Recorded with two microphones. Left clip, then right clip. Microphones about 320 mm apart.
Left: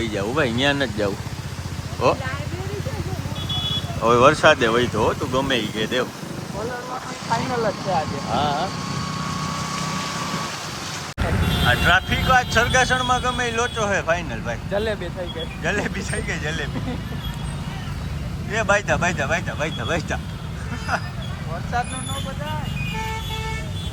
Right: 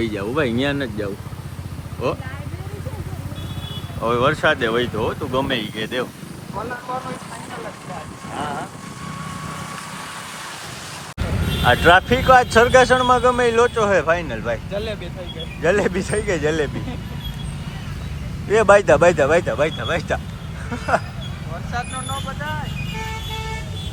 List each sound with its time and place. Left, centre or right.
0.0 s a man's voice: centre
4.0 s a man's voice: centre
11.6 s a man's voice: centre
14.7 s speech: left
15.6 s a man's voice: centre
18.5 s a man's voice: centre
22.9 s vehicle: centre